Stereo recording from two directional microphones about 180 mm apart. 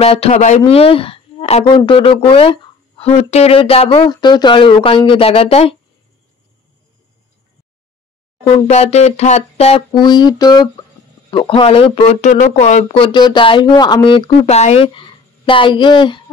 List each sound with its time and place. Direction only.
0.0 s speech: 35° left (ahead or behind)
8.5 s speech: 35° left (ahead or behind)